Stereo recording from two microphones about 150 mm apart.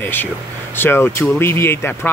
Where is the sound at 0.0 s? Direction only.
15° left (ahead or behind).